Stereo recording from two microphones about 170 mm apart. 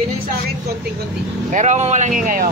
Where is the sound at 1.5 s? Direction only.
45° right (ahead or behind).